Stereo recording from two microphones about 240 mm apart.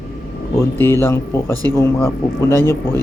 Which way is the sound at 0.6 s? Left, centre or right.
Centre.